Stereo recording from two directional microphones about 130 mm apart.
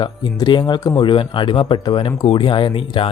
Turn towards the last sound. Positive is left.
turn(degrees=40)  # may be behind; listen again after turning